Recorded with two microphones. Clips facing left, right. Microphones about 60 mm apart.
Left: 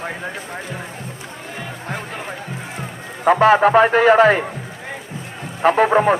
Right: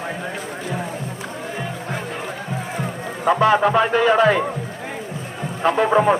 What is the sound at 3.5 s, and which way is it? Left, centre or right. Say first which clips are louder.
Speech: left 4 dB; left.